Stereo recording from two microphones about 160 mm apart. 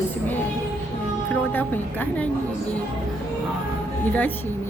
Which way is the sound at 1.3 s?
10° left (ahead or behind).